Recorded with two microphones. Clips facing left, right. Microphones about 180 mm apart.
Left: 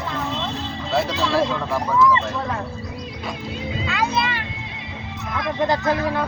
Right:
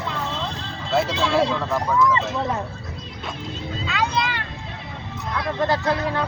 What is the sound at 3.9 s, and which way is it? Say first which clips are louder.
Speech: even; 5° left (ahead or behind).